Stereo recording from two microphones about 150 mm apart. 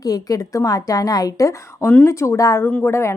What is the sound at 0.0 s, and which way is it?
A woman's voice, 25° left (ahead or behind).